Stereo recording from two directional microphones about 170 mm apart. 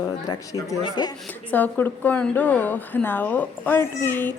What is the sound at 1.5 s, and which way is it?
A woman's voice, 10° left (ahead or behind).